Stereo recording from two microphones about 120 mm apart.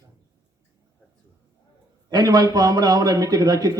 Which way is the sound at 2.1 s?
35° right (ahead or behind).